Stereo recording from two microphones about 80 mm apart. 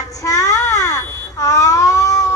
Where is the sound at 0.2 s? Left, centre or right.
Left.